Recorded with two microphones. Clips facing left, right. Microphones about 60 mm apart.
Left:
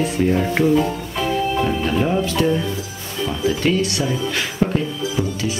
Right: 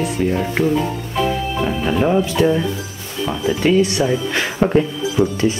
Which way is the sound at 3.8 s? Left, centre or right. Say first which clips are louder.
Right 5 dB; right.